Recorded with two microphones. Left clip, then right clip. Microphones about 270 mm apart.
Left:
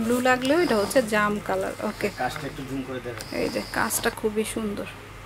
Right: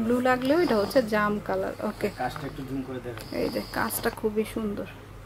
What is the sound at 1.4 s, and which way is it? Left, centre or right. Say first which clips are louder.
Speech: left 2 dB; centre.